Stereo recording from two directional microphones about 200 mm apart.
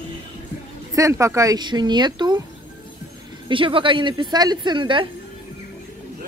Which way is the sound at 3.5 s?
25° right (ahead or behind).